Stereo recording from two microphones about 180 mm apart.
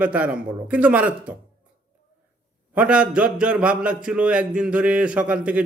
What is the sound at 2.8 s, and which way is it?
A man's voice, 5° right (ahead or behind).